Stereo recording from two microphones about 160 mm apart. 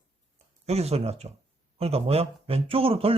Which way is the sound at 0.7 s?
40° right (ahead or behind).